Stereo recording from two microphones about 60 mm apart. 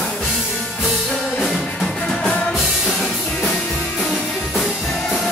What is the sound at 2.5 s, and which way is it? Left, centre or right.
Music, centre.